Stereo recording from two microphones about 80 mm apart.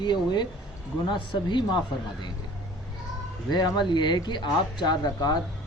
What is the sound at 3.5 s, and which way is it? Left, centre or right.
A woman's voice, left.